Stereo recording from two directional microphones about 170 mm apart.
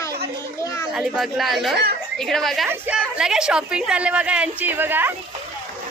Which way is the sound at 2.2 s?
Centre (ahead or behind).